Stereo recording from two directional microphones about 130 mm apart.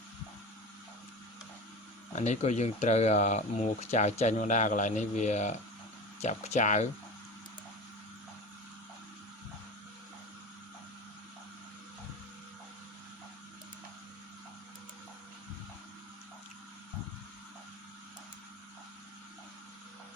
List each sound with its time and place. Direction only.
2.1 s speech: 60° left (ahead or behind)